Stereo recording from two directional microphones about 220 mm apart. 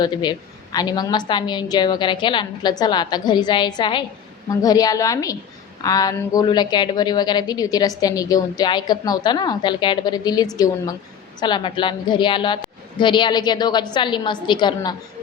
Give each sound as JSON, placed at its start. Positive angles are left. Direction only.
{"t": 0.0, "sound": "a woman's voice", "side_deg": 20}